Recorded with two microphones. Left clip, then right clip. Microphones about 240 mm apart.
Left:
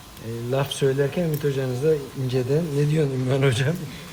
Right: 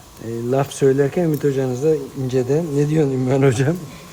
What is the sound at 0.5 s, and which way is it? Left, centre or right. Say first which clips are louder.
Speech: right 6 dB; right.